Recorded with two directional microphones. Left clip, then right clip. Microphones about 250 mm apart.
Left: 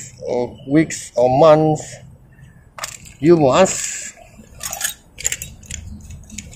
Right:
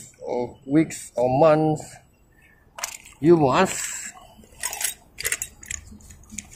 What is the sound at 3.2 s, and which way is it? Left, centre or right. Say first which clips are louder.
Speech: left 5 dB; centre.